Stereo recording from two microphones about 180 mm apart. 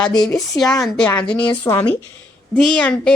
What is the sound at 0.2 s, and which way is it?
Speech, centre (ahead or behind).